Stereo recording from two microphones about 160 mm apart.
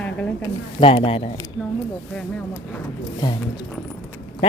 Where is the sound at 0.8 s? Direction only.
35° left (ahead or behind).